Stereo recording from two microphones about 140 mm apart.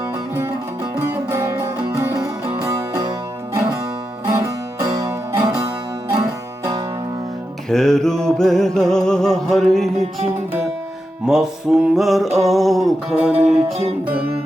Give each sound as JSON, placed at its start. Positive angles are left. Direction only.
{"t": 0.9, "sound": "music", "side_deg": -20}
{"t": 4.4, "sound": "music", "side_deg": -25}
{"t": 7.7, "sound": "music", "side_deg": 5}
{"t": 11.3, "sound": "music", "side_deg": -5}